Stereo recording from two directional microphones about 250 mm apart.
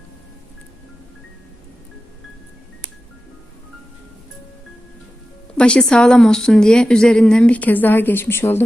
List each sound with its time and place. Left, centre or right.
5.5 s a woman's voice: centre